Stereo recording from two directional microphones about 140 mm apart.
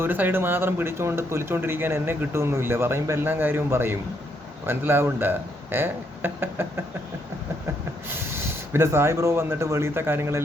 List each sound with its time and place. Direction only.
0.0 s speech: 15° right (ahead or behind)
8.1 s speech: 15° right (ahead or behind)